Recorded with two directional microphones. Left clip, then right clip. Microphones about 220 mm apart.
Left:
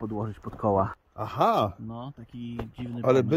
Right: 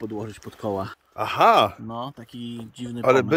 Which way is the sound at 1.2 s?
5° left (ahead or behind).